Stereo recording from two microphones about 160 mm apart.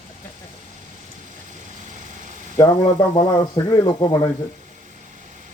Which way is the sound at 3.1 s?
30° left (ahead or behind).